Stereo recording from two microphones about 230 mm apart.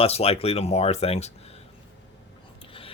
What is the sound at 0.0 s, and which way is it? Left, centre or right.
Speech, left.